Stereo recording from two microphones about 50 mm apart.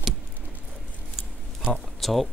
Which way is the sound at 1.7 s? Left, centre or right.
Centre.